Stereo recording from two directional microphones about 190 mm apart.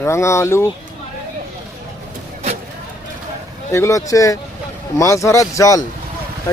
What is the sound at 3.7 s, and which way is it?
Speech, 15° left (ahead or behind).